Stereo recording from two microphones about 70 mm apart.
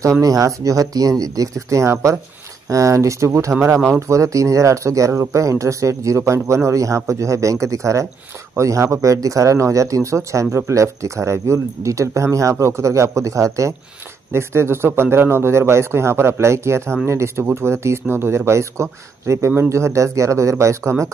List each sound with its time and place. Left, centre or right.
0.2 s a man's voice: right